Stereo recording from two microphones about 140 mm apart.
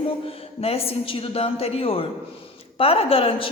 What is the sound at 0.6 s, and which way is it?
A woman's voice, 45° left (ahead or behind).